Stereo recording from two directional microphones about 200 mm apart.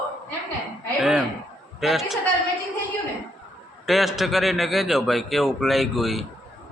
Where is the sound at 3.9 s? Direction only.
Centre (ahead or behind).